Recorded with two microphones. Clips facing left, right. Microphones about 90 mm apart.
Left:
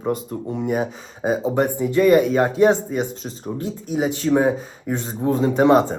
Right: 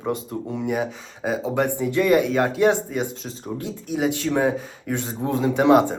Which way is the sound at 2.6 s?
35° left (ahead or behind).